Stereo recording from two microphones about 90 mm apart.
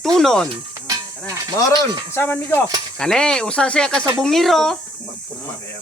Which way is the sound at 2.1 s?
25° left (ahead or behind).